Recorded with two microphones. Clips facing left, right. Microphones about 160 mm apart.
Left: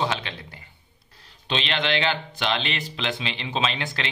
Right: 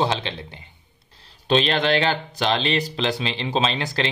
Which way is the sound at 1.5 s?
40° right (ahead or behind).